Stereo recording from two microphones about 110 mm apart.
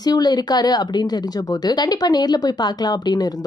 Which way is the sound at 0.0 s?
40° left (ahead or behind).